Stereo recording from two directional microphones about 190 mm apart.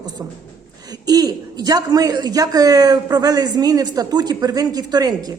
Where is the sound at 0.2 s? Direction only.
15° right (ahead or behind).